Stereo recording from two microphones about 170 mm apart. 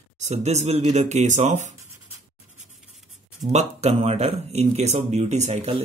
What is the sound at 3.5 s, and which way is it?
Speech, 40° right (ahead or behind).